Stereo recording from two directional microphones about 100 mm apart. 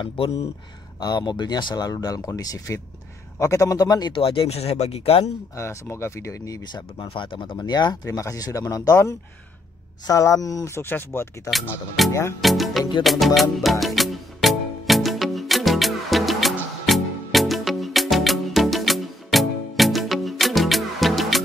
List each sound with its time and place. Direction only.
0.9 s speech: 45° left (ahead or behind)
4.1 s speech: 65° left (ahead or behind); by 5.3 s 85° left
5.6 s speech: 25° left (ahead or behind)
6.7 s speech: 55° left (ahead or behind)
7.5 s speech: 45° left (ahead or behind); by 11.1 s 20° left (ahead or behind)
12.1 s speech: 30° left (ahead or behind)
12.4 s speech: centre (ahead or behind)
13.0 s music: centre (ahead or behind)